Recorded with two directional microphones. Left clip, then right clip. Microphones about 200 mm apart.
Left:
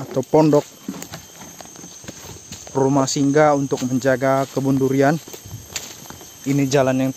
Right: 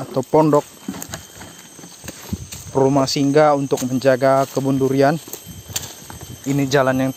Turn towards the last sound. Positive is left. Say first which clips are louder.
# right 1 dB
turn(degrees=5)  # may be behind; listen again after turning